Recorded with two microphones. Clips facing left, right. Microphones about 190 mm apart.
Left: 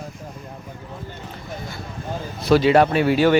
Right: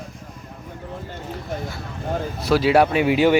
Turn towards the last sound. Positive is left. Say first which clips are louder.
# even
turn(degrees=-15)  # may be behind; listen again after turning